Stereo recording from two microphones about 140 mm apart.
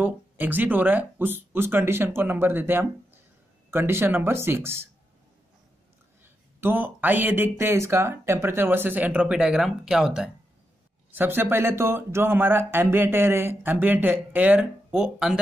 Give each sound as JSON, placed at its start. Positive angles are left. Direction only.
{"t": 0.0, "sound": "speech", "side_deg": -10}
{"t": 6.2, "sound": "speech", "side_deg": -15}
{"t": 11.1, "sound": "speech", "side_deg": -15}